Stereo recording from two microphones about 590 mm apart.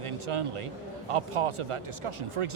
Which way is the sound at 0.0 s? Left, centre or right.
Right.